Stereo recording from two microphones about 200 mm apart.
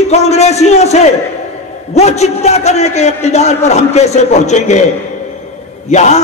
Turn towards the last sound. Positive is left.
turn(degrees=35)  # may be behind; listen again after turning